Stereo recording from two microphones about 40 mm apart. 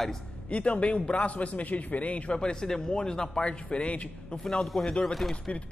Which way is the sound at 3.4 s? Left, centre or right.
Left.